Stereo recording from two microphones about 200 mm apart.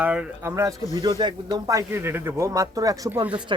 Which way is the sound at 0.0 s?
5° right (ahead or behind).